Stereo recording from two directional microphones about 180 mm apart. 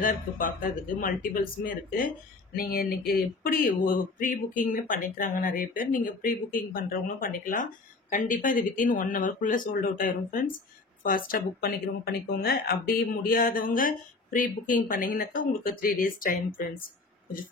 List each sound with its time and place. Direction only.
0.0 s speech: 50° left (ahead or behind)